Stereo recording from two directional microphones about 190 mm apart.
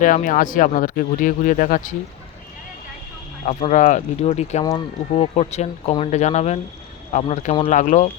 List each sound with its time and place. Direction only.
0.0 s speech: 45° left (ahead or behind)
3.4 s speech: 40° left (ahead or behind)